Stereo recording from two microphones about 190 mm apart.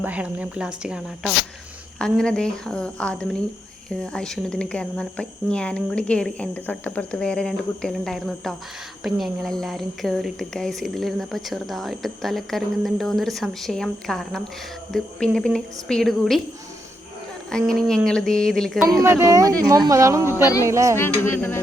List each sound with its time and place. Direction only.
0.0 s speech: 5° right (ahead or behind)
17.5 s speech: 5° left (ahead or behind)
18.9 s speech: 15° right (ahead or behind)
20.3 s speech: 15° left (ahead or behind)
20.7 s speech: 15° right (ahead or behind)
20.9 s speech: 10° left (ahead or behind)